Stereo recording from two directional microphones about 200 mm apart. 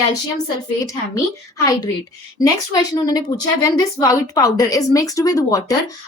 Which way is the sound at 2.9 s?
20° left (ahead or behind).